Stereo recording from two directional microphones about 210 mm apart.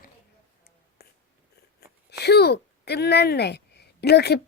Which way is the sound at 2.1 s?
50° left (ahead or behind).